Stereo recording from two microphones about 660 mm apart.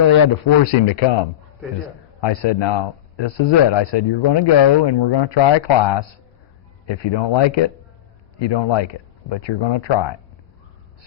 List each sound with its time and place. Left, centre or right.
0.6 s speech: left
2.2 s speech: left